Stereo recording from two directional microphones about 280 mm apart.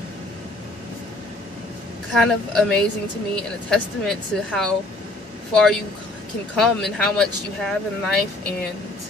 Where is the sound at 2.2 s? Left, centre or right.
Centre.